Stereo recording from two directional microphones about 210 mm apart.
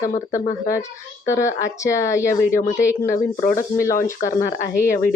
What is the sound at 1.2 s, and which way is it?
Speech, 15° left (ahead or behind).